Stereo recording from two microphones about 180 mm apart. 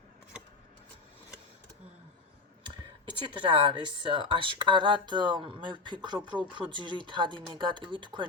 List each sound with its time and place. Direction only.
3.2 s speech: 30° right (ahead or behind)